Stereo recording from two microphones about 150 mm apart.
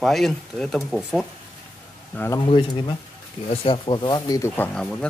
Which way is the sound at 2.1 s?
15° left (ahead or behind).